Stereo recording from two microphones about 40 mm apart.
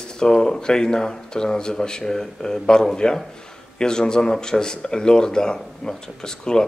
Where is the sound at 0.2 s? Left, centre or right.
Centre.